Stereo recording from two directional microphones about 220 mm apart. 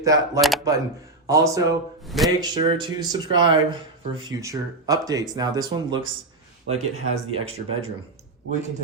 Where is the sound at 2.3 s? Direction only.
20° right (ahead or behind).